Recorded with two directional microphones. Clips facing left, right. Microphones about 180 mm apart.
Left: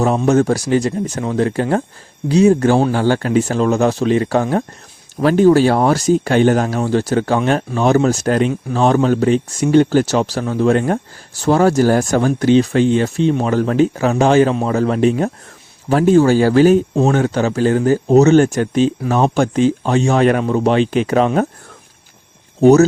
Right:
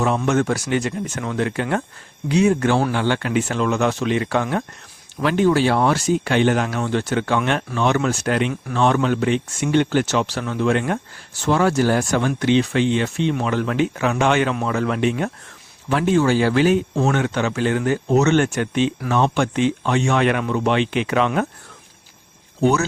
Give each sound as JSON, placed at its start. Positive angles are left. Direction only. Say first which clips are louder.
{"t": 0.3, "sound": "speech", "louder": "left 6 dB", "side_deg": 35}
{"t": 22.6, "sound": "speech", "louder": "left 9 dB", "side_deg": 40}